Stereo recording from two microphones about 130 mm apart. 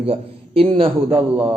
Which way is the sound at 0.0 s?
50° right (ahead or behind).